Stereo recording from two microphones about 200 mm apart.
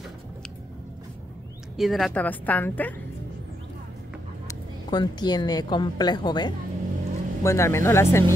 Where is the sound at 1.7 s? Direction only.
Centre (ahead or behind).